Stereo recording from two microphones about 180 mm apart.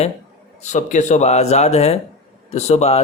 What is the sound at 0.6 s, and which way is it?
Speech, 40° left (ahead or behind).